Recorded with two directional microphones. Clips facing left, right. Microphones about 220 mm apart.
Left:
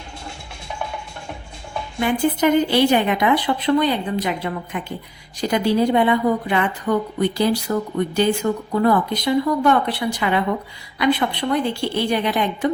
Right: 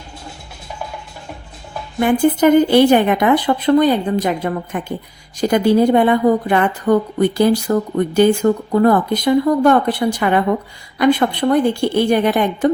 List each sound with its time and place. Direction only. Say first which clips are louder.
0.8 s music: even; 5° right (ahead or behind)
2.0 s speech: right 5 dB; 50° right (ahead or behind)